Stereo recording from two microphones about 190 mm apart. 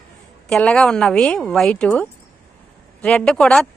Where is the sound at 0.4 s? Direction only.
5° left (ahead or behind).